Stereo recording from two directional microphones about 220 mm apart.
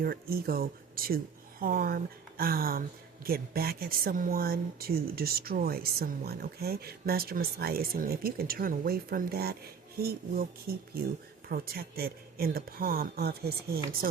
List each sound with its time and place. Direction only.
0.0 s speech: 40° right (ahead or behind)